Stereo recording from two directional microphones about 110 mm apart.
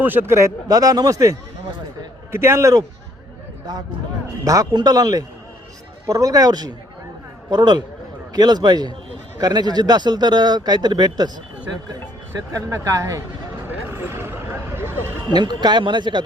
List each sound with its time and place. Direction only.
0.0 s speech: 20° right (ahead or behind)
4.4 s speech: 30° right (ahead or behind)
12.5 s speech: 30° right (ahead or behind)
13.7 s vehicle: 20° right (ahead or behind)
15.3 s speech: 40° right (ahead or behind)